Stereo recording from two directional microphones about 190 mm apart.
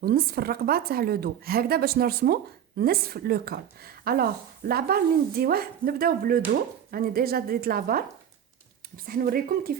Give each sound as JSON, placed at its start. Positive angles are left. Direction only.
{"t": 0.0, "sound": "a woman's voice", "side_deg": -55}
{"t": 9.0, "sound": "a woman's voice", "side_deg": -50}